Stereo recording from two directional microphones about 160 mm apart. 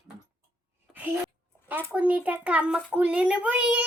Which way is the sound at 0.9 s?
Centre (ahead or behind).